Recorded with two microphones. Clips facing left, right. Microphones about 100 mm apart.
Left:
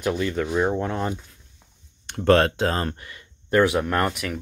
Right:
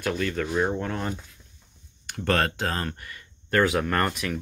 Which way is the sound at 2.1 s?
25° left (ahead or behind).